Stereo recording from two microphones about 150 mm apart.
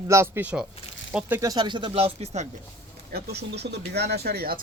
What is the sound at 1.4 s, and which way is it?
Speech, 25° right (ahead or behind).